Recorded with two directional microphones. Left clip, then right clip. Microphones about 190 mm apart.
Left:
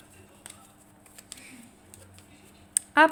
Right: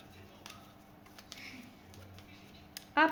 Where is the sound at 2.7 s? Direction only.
55° left (ahead or behind).